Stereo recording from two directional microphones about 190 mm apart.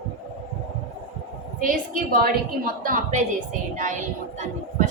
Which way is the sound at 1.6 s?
45° right (ahead or behind).